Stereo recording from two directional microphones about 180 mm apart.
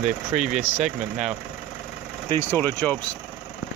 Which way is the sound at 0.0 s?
45° right (ahead or behind).